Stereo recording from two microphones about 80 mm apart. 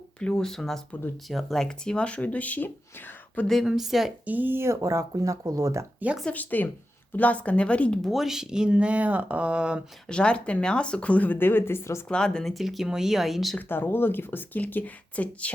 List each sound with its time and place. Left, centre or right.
0.2 s speech: centre
3.4 s speech: centre
4.3 s speech: right
6.0 s speech: right
6.3 s speech: left
8.1 s speech: centre
10.1 s speech: centre; by 12.0 s left
12.0 s speech: centre
13.6 s speech: left